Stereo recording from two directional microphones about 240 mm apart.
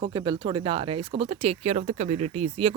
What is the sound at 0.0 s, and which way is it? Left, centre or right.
Speech, centre.